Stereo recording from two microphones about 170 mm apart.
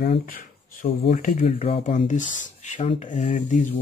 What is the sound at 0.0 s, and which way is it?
Speech, 55° left (ahead or behind).